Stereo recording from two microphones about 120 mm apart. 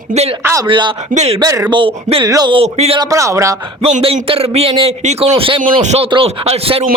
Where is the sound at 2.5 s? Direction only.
55° right (ahead or behind).